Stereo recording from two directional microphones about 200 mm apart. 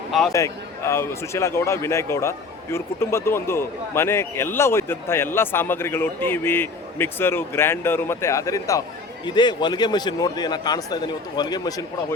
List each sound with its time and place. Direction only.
0.3 s a man's voice: 15° left (ahead or behind)